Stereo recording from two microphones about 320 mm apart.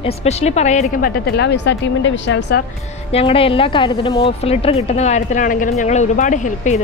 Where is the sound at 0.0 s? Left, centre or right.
Centre; by 2.6 s left.